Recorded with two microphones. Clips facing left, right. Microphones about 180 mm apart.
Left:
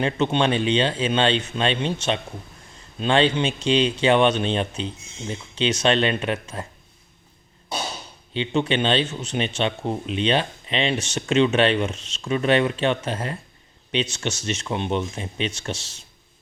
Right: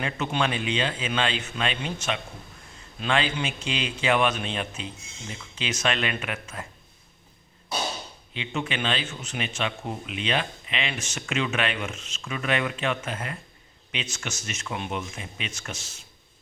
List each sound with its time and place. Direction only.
0.0 s speech: 30° left (ahead or behind)
8.3 s speech: 30° left (ahead or behind)